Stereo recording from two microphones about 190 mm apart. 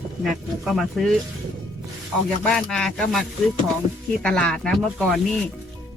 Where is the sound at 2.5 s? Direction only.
5° left (ahead or behind).